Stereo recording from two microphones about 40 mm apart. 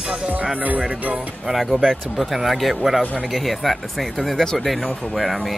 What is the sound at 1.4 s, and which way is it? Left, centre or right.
Speech, centre.